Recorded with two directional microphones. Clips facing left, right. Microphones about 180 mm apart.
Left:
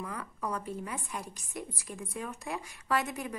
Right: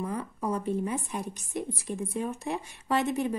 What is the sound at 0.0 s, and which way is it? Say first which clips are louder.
A woman's voice: right 6 dB; 25° right (ahead or behind).